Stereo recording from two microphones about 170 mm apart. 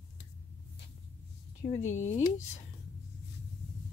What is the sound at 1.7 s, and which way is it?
Speech, 45° left (ahead or behind).